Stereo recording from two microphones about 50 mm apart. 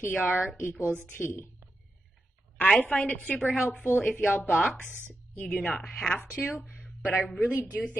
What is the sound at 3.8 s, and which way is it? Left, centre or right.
Speech, left.